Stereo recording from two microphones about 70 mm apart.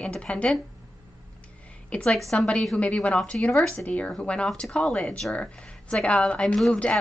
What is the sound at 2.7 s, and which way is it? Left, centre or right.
Speech, centre.